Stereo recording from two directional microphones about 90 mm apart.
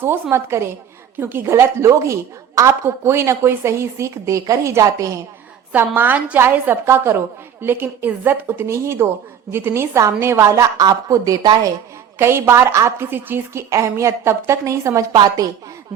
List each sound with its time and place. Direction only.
0.0 s a woman's voice: 25° right (ahead or behind)
5.7 s a woman's voice: 20° right (ahead or behind); by 11.7 s 40° right (ahead or behind)
12.2 s a woman's voice: 30° right (ahead or behind)
13.1 s a woman's voice: 20° right (ahead or behind)
15.1 s a woman's voice: 50° right (ahead or behind)